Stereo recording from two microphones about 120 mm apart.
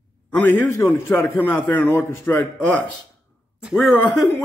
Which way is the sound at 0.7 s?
20° left (ahead or behind).